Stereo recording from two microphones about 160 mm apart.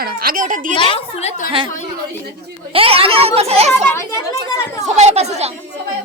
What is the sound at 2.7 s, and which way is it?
Speech, 35° right (ahead or behind).